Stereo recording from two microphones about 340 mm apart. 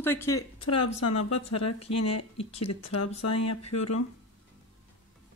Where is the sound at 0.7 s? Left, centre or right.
Left.